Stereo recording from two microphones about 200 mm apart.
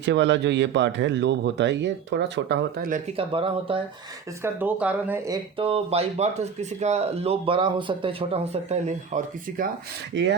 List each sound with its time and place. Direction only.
0.0 s speech: 60° right (ahead or behind)
3.2 s speech: 25° right (ahead or behind)
4.4 s speech: 5° right (ahead or behind)
5.5 s speech: 30° right (ahead or behind)
10.1 s speech: 65° right (ahead or behind)